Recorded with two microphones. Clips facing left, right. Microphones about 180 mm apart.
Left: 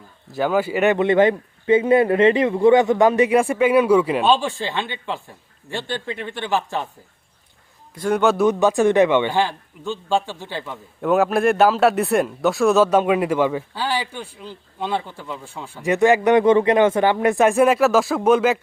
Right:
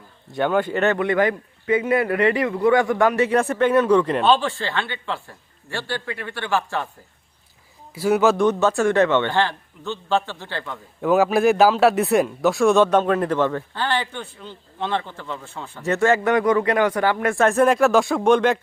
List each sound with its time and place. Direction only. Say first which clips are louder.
0.3 s speech: left 1 dB; 5° left (ahead or behind)
7.9 s speech: right 1 dB; 5° right (ahead or behind)
8.4 s speech: left 2 dB; 15° left (ahead or behind)
11.0 s speech: even; centre (ahead or behind)